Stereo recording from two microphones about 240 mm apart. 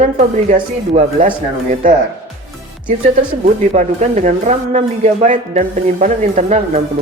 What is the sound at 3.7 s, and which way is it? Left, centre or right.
Speech, right.